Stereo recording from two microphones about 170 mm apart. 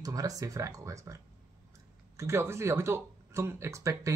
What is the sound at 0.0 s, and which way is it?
Speech, 20° right (ahead or behind).